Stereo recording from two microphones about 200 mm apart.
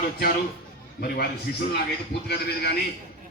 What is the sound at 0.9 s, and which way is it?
A man's voice, 50° left (ahead or behind).